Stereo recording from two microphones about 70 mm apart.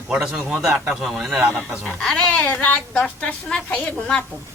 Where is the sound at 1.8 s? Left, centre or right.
Centre.